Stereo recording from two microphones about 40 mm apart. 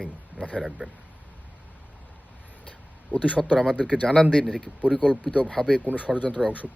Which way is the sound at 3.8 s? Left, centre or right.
Left.